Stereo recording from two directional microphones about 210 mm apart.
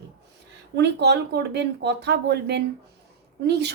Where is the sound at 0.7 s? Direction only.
55° right (ahead or behind).